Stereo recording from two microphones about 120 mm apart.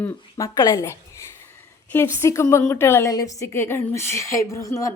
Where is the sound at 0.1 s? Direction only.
25° left (ahead or behind).